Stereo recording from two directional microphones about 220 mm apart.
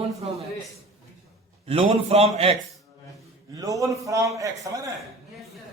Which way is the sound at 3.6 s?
15° right (ahead or behind).